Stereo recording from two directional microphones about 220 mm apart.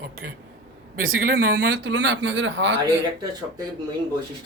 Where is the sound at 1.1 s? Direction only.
45° right (ahead or behind).